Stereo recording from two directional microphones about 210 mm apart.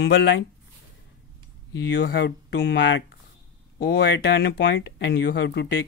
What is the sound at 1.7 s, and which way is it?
Speech, 55° left (ahead or behind).